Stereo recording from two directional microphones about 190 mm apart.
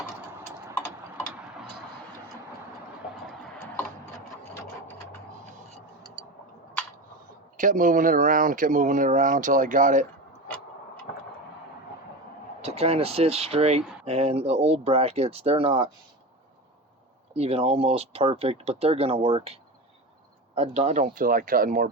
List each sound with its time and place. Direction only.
7.5 s speech: 45° right (ahead or behind)
12.6 s speech: 30° right (ahead or behind)
17.3 s speech: 30° right (ahead or behind)
20.6 s speech: 35° right (ahead or behind)